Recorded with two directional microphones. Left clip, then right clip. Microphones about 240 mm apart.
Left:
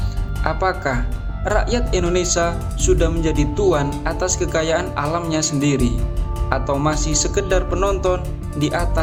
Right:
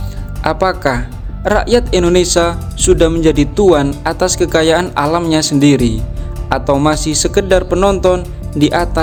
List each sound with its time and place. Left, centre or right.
0.4 s speech: right